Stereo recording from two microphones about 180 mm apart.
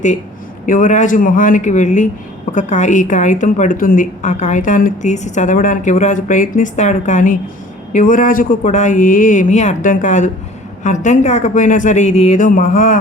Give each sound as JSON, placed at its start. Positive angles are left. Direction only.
{"t": 0.6, "sound": "a woman's voice", "side_deg": 45}